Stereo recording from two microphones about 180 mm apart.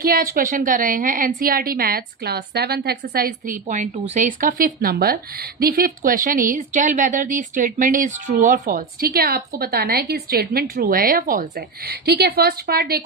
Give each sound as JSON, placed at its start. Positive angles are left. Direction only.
{"t": 0.0, "sound": "a woman's voice", "side_deg": -55}